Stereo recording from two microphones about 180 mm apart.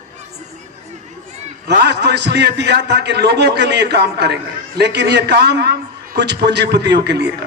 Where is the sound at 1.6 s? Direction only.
70° right (ahead or behind).